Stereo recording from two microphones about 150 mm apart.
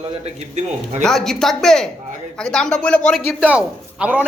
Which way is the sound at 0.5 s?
50° right (ahead or behind).